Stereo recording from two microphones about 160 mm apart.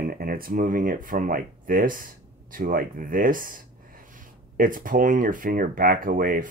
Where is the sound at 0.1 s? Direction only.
65° right (ahead or behind).